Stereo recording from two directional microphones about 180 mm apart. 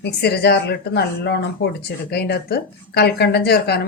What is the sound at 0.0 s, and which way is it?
A woman's voice, 65° left (ahead or behind).